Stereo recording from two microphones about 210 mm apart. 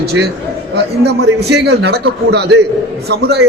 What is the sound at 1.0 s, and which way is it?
A man's voice, 50° right (ahead or behind).